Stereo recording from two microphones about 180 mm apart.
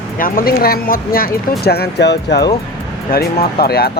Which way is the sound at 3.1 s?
60° left (ahead or behind).